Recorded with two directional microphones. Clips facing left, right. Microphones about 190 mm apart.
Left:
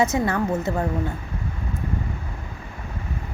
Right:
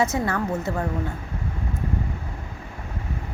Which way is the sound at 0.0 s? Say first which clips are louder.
Left 2 dB; 20° left (ahead or behind).